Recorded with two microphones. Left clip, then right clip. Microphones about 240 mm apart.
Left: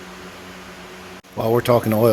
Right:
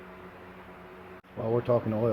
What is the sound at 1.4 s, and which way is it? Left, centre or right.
Speech, left.